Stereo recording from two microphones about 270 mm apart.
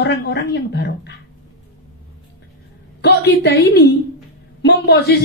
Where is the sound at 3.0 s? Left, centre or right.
Left.